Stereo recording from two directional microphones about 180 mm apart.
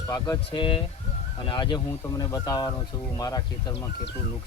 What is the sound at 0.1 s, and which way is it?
Speech, 25° left (ahead or behind).